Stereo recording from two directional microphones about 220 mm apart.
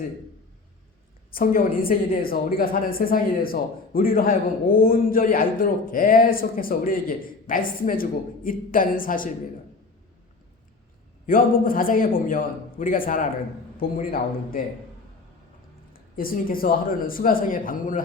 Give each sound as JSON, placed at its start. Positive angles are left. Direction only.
{"t": 1.3, "sound": "a woman's voice", "side_deg": 40}
{"t": 11.3, "sound": "a woman's voice", "side_deg": 40}
{"t": 15.9, "sound": "a man's voice", "side_deg": 40}